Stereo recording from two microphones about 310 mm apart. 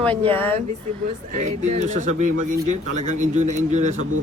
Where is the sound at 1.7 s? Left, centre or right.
Right.